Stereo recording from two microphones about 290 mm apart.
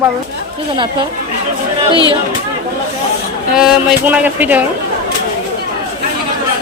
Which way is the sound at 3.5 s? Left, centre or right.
Centre.